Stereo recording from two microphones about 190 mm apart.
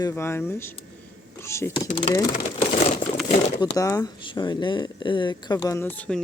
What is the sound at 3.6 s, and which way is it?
Speech, 20° left (ahead or behind).